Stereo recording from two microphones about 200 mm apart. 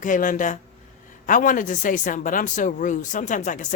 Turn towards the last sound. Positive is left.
turn(degrees=40)  # may be behind; listen again after turning